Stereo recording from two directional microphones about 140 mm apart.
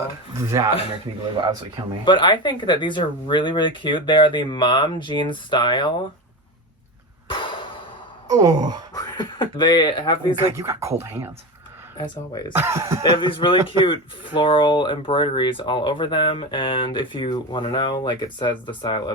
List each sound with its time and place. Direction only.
0.3 s gasp: 20° right (ahead or behind)
2.0 s speech: 35° left (ahead or behind)
7.3 s a sound: 35° left (ahead or behind)
8.3 s gasp: 30° right (ahead or behind)
9.0 s speech: 30° left (ahead or behind)
10.5 s gasp: 20° right (ahead or behind)
11.9 s speech: 30° left (ahead or behind)
12.5 s gasp: 20° right (ahead or behind)
13.0 s speech: 35° left (ahead or behind)